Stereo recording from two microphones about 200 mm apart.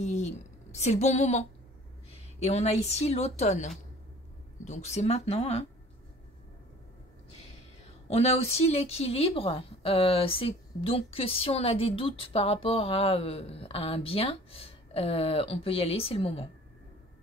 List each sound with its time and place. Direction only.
0.0 s a woman's voice: 35° left (ahead or behind)
8.1 s a woman's voice: 30° left (ahead or behind)